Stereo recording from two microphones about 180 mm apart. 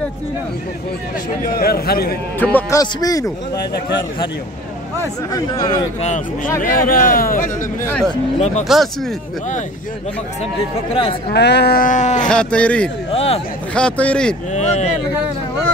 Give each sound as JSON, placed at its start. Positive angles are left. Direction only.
{"t": 1.4, "sound": "a man's voice", "side_deg": 55}
{"t": 2.3, "sound": "speech", "side_deg": 10}
{"t": 2.8, "sound": "speech", "side_deg": 20}
{"t": 5.3, "sound": "speech", "side_deg": 20}
{"t": 6.6, "sound": "speech", "side_deg": 50}
{"t": 7.8, "sound": "speech", "side_deg": 10}
{"t": 8.7, "sound": "speech", "side_deg": 0}
{"t": 10.9, "sound": "speech", "side_deg": 30}
{"t": 11.3, "sound": "speech", "side_deg": 70}
{"t": 12.3, "sound": "speech", "side_deg": 5}
{"t": 13.1, "sound": "a man's voice", "side_deg": 35}
{"t": 13.7, "sound": "speech", "side_deg": 5}